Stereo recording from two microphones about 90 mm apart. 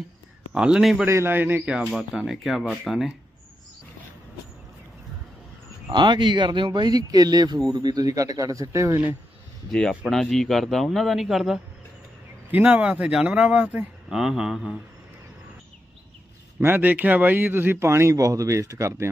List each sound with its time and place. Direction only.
0.6 s speech: 5° right (ahead or behind)
1.0 s a man's voice: 25° right (ahead or behind)
1.7 s a man's voice: 10° right (ahead or behind)
5.9 s a man's voice: 60° right (ahead or behind); by 9.0 s 35° right (ahead or behind)
9.7 s a man's voice: 10° left (ahead or behind)
12.4 s speech: 15° right (ahead or behind)
14.1 s a man's voice: 5° right (ahead or behind)
16.5 s speech: 25° right (ahead or behind)